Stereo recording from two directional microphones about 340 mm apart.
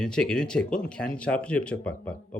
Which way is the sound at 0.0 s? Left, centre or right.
Centre.